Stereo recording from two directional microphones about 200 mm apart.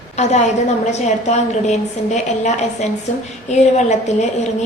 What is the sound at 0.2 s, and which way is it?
A woman's voice, 35° left (ahead or behind).